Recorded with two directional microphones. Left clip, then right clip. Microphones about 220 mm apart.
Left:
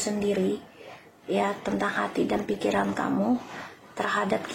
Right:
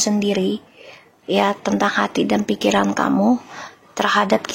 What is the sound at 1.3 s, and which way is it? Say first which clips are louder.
Speech: right 8 dB; 40° right (ahead or behind).